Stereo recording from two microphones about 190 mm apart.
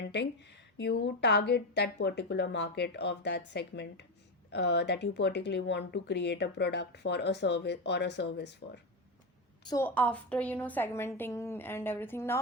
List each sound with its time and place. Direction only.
0.0 s speech: 65° left (ahead or behind)
9.6 s a woman's voice: 15° left (ahead or behind)